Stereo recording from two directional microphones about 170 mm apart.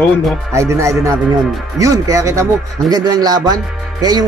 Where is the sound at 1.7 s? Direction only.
20° right (ahead or behind).